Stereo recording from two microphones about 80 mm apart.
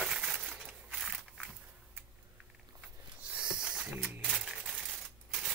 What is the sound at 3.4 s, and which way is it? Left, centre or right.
Music, centre.